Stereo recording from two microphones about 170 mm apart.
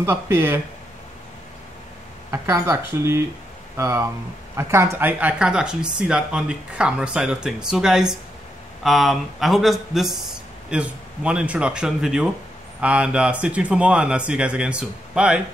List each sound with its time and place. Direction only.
0.0 s speech: 15° right (ahead or behind)
2.3 s speech: 15° right (ahead or behind)